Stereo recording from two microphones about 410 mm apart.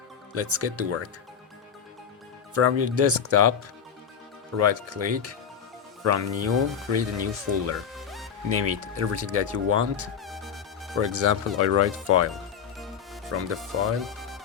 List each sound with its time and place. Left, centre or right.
0.3 s speech: right
2.6 s speech: right
4.5 s speech: right
7.9 s music: centre
8.4 s speech: right
10.2 s music: centre
10.9 s speech: right
13.5 s speech: centre